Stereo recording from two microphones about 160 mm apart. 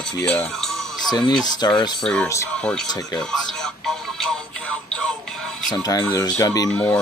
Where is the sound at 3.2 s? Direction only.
5° left (ahead or behind).